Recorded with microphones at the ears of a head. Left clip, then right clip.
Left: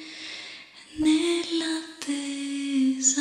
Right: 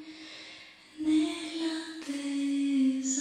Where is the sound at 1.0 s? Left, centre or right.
Left.